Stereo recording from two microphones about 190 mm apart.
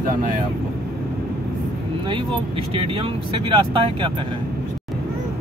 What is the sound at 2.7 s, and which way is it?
Speech, 30° right (ahead or behind).